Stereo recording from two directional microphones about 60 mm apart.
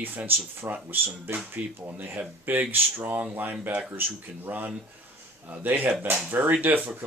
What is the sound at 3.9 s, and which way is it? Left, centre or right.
Speech, right.